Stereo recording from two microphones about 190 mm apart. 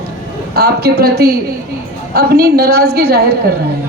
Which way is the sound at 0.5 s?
60° right (ahead or behind).